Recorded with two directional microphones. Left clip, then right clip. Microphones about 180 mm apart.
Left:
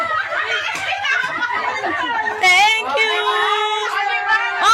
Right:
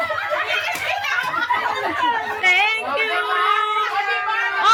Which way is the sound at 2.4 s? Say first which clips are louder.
Left 4 dB; 20° left (ahead or behind).